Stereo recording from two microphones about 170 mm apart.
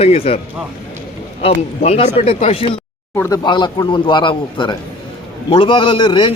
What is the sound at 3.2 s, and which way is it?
A man's voice, 20° left (ahead or behind).